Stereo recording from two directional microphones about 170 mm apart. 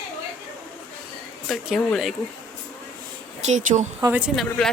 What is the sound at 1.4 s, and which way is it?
Speech, centre (ahead or behind).